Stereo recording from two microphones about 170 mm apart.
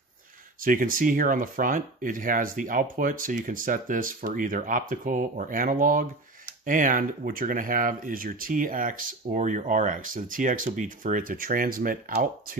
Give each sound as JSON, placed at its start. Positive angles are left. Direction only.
{"t": 0.6, "sound": "speech", "side_deg": -55}